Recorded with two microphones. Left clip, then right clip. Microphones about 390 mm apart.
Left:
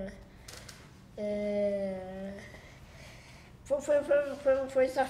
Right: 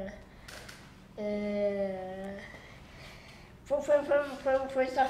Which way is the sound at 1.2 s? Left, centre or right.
Left.